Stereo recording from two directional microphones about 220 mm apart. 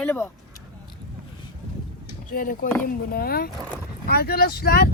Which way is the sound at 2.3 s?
40° left (ahead or behind).